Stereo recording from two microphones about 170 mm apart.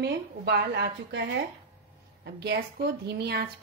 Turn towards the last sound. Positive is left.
turn(degrees=-75)  # may be behind; listen again after turning